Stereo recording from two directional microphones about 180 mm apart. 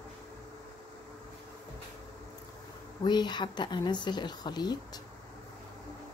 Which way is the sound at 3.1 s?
25° left (ahead or behind).